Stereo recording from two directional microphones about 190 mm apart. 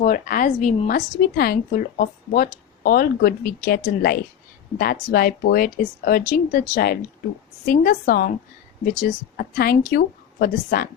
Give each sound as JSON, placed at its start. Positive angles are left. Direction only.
{"t": 0.0, "sound": "a woman's voice", "side_deg": 45}
{"t": 9.6, "sound": "a woman's voice", "side_deg": 55}